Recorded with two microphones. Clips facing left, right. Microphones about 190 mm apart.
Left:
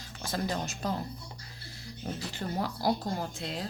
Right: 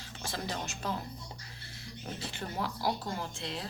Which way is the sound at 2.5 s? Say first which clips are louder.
Left 4 dB; 40° left (ahead or behind).